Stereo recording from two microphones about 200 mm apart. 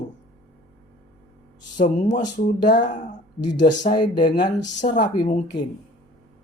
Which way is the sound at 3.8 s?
25° left (ahead or behind).